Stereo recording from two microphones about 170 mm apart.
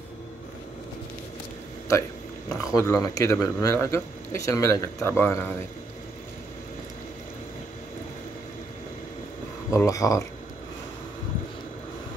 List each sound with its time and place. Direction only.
2.5 s speech: 20° left (ahead or behind)
9.7 s speech: 20° left (ahead or behind)